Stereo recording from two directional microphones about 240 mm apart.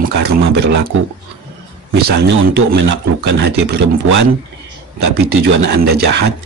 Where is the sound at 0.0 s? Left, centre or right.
Right.